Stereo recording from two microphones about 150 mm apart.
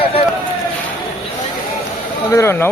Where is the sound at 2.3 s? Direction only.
15° left (ahead or behind).